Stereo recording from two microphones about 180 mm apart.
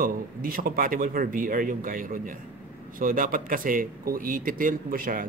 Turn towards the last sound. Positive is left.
turn(degrees=-50)  # may be behind; listen again after turning